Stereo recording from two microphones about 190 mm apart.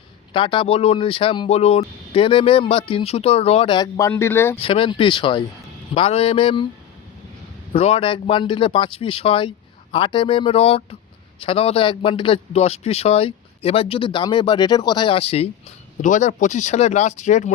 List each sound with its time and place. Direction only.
0.3 s speech: 25° left (ahead or behind)
4.5 s speech: 30° left (ahead or behind)
7.7 s speech: 30° left (ahead or behind)